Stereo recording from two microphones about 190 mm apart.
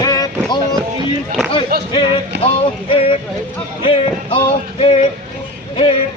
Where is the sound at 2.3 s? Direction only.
65° right (ahead or behind).